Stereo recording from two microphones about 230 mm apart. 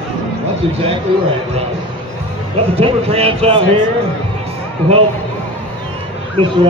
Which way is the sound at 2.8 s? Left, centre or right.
Right.